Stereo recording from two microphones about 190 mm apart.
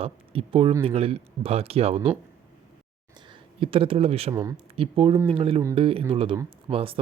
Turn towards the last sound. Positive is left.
turn(degrees=-30)  # may be behind; listen again after turning